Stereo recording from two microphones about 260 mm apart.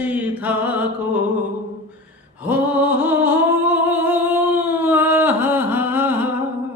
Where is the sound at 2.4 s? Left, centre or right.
Centre.